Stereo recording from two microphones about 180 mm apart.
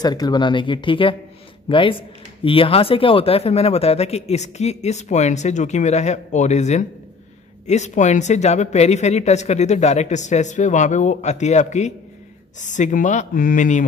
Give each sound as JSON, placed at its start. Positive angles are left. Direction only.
{"t": 0.0, "sound": "speech", "side_deg": 20}